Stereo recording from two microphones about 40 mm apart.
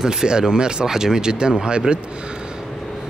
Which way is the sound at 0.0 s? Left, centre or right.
Centre.